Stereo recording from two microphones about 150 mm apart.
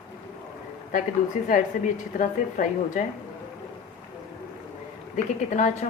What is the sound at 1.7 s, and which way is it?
A woman's voice, 65° left (ahead or behind).